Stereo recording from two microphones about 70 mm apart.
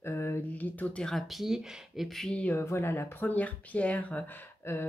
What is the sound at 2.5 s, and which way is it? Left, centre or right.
Speech, left.